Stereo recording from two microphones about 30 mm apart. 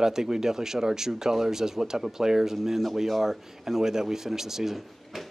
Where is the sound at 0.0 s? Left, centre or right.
Centre.